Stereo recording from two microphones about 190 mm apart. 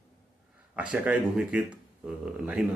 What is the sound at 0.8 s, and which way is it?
Speech, 10° right (ahead or behind).